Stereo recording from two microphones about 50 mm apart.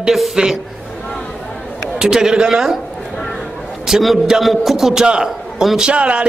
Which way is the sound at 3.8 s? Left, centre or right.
Centre.